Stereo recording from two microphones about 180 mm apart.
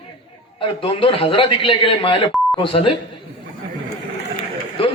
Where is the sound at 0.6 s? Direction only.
30° left (ahead or behind).